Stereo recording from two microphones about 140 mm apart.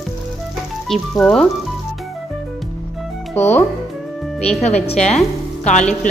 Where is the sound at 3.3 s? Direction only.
15° left (ahead or behind).